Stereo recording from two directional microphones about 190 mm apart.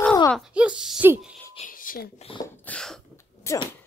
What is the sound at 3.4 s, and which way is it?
Speech, 15° left (ahead or behind).